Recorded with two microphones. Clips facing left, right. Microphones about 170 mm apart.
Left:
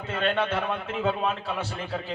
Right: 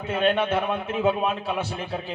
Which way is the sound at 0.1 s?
15° right (ahead or behind).